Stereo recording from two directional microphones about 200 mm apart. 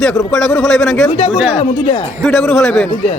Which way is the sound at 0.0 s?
5° left (ahead or behind).